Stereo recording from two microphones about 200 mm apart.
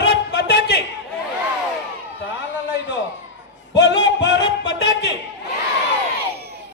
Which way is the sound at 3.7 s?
60° left (ahead or behind).